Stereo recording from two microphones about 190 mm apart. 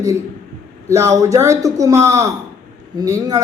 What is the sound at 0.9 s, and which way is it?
A man's voice, 15° right (ahead or behind).